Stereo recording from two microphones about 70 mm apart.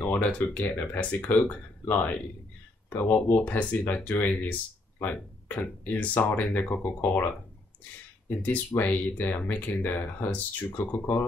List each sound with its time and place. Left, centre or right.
0.0 s speech: left
8.4 s speech: left